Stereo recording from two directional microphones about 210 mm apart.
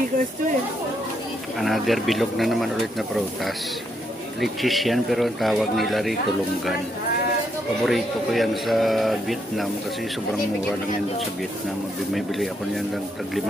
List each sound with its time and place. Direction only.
1.6 s speech: centre (ahead or behind)
7.8 s speech: centre (ahead or behind)
12.1 s speech: centre (ahead or behind)